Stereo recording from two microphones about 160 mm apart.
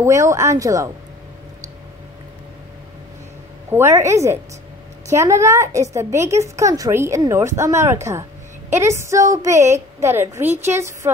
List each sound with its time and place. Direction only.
0.0 s speech: 20° right (ahead or behind)
3.7 s a woman's voice: 20° right (ahead or behind)